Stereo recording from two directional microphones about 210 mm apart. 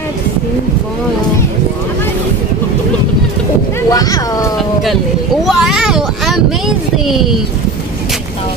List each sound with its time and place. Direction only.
3.9 s boat: 15° left (ahead or behind)
5.4 s vehicle: centre (ahead or behind)
7.1 s speech: centre (ahead or behind)